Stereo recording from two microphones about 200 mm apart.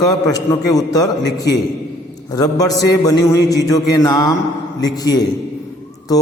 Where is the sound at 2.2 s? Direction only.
20° left (ahead or behind).